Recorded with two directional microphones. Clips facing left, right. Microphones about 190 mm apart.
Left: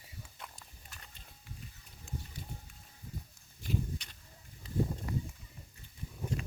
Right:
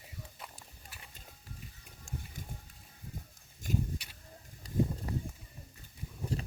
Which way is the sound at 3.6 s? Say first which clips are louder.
Right 2 dB; 45° right (ahead or behind).